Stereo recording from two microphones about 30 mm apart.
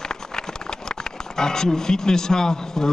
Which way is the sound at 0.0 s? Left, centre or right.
Left.